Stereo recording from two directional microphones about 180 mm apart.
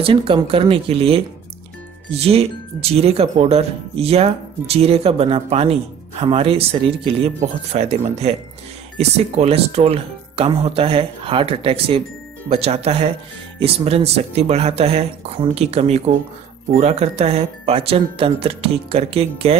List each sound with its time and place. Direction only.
0.0 s speech: 30° right (ahead or behind)